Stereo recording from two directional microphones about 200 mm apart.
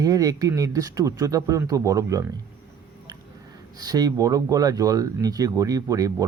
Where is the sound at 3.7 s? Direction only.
20° right (ahead or behind).